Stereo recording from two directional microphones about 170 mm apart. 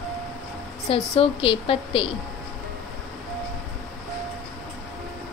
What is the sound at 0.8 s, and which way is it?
A woman's voice, 35° left (ahead or behind).